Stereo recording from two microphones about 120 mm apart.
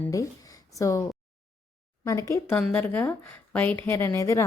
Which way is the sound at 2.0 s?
25° left (ahead or behind).